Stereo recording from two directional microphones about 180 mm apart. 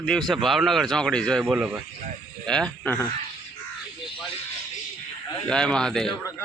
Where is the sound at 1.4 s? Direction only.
5° right (ahead or behind).